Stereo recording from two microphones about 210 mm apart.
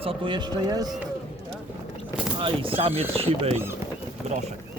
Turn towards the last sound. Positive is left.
turn(degrees=-30)  # may be behind; listen again after turning